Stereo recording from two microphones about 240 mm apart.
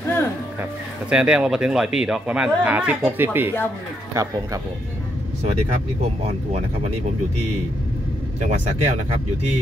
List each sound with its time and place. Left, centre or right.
1.1 s speech: centre
8.4 s speech: right